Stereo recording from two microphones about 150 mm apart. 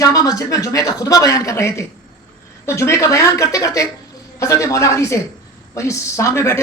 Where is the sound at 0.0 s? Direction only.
25° left (ahead or behind).